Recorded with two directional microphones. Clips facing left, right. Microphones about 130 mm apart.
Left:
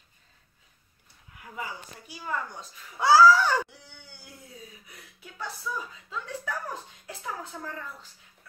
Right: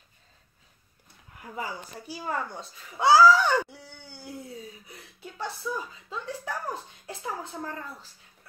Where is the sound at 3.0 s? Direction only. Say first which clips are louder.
Even; 20° right (ahead or behind).